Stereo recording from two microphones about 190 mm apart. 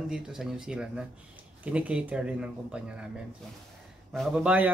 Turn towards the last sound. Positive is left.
turn(degrees=-5)  # may be behind; listen again after turning